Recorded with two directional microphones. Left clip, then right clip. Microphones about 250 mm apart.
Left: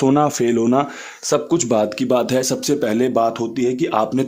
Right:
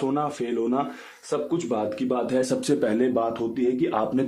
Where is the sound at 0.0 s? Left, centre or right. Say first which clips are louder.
Left 10 dB; left.